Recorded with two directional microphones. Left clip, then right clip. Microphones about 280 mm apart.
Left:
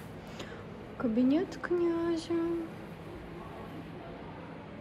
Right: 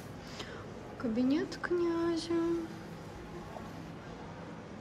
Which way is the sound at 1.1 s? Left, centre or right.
Centre.